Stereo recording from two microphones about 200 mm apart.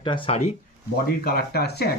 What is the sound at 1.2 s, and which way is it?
Speech, 50° left (ahead or behind).